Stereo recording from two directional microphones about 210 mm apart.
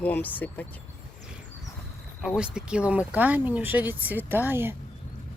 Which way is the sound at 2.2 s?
5° right (ahead or behind).